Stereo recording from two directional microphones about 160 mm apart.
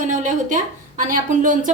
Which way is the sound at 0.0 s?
50° right (ahead or behind).